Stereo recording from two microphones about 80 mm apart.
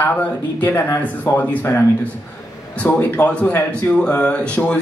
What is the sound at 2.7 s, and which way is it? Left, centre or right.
Speech, centre.